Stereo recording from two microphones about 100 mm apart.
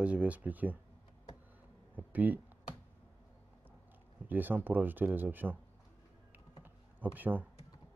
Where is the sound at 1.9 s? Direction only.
15° right (ahead or behind).